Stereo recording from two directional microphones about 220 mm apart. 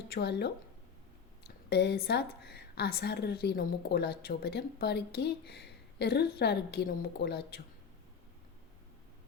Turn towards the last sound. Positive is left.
turn(degrees=45)  # may be behind; listen again after turning